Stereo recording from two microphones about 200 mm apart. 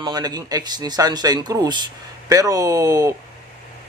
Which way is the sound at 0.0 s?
20° right (ahead or behind).